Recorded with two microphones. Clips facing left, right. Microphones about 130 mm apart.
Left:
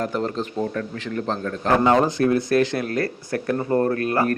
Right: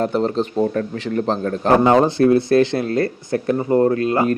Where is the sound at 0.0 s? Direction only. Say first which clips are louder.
Right 6 dB; 30° right (ahead or behind).